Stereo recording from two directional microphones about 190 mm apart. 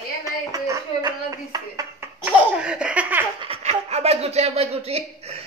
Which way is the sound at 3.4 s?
30° right (ahead or behind).